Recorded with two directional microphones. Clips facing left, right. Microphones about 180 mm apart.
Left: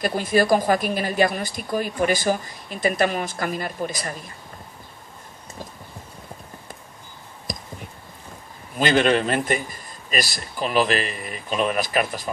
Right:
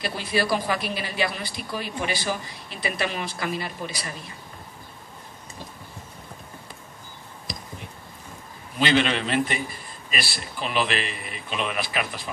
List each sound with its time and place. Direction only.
0.0 s speech: 45° left (ahead or behind)
7.5 s a sound: 45° left (ahead or behind)
8.7 s speech: 45° left (ahead or behind)